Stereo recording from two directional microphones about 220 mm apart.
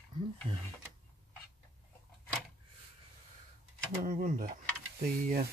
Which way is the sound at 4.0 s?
40° right (ahead or behind).